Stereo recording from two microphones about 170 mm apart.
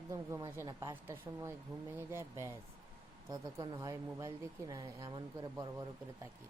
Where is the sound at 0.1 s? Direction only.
20° right (ahead or behind).